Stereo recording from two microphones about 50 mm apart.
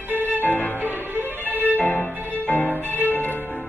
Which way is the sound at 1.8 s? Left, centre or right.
Left.